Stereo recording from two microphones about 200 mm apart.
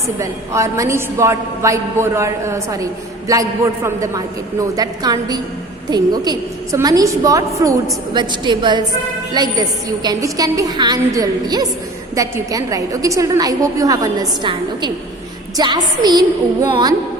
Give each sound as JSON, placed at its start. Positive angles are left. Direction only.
{"t": 0.2, "sound": "a woman's voice", "side_deg": -15}